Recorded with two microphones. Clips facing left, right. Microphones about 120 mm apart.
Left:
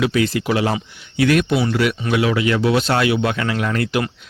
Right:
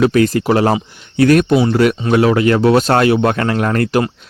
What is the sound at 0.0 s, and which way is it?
Speech, 45° right (ahead or behind).